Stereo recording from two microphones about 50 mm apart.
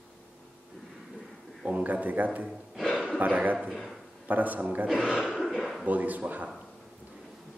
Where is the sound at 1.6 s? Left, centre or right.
Right.